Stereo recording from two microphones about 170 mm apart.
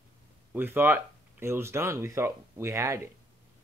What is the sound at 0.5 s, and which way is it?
Speech, 10° right (ahead or behind).